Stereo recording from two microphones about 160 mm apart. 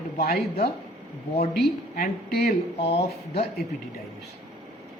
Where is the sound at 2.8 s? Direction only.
40° left (ahead or behind).